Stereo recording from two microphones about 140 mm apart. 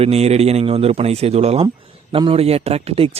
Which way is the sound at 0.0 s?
50° right (ahead or behind).